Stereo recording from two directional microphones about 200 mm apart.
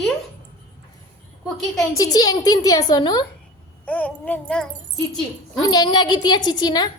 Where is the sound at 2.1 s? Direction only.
20° left (ahead or behind).